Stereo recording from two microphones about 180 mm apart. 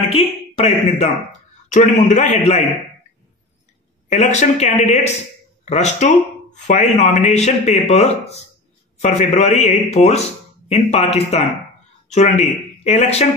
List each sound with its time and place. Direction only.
0.1 s a man's voice: 35° left (ahead or behind)
4.1 s a man's voice: 40° left (ahead or behind)